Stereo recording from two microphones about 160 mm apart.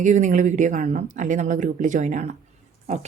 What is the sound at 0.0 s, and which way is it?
A woman's voice, 50° right (ahead or behind).